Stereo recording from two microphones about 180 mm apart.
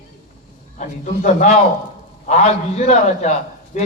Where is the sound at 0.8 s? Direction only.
40° left (ahead or behind).